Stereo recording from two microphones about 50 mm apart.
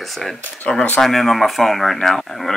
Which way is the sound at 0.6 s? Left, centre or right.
Centre.